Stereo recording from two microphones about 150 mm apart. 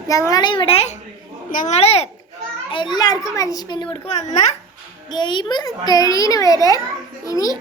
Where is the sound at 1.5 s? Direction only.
65° left (ahead or behind).